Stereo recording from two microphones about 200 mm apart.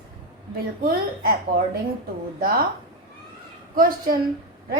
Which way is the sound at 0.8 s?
50° right (ahead or behind).